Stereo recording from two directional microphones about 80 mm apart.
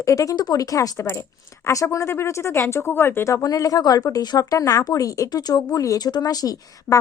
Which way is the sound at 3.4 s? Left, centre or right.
Left.